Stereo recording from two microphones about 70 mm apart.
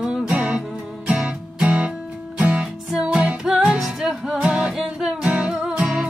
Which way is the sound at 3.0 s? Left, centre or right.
Centre.